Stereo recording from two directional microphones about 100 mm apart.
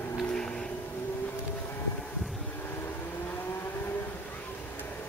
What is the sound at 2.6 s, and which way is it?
Vehicle, 20° left (ahead or behind).